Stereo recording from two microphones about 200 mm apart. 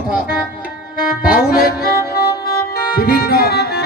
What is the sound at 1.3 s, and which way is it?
Music, 50° left (ahead or behind).